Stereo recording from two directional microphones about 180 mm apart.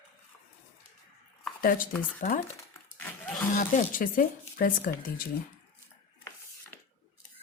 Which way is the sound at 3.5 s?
45° left (ahead or behind).